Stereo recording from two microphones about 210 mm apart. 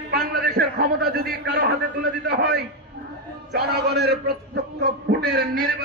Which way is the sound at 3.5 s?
50° right (ahead or behind).